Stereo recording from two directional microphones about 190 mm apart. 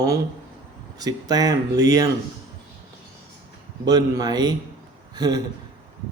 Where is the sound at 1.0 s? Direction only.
20° right (ahead or behind).